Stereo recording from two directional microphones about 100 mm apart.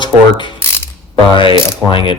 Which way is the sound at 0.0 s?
50° left (ahead or behind).